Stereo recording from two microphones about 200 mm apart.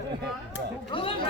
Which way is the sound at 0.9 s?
25° left (ahead or behind).